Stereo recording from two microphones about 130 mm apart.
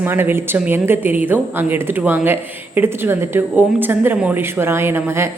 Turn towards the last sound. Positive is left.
turn(degrees=-20)  # may be behind; listen again after turning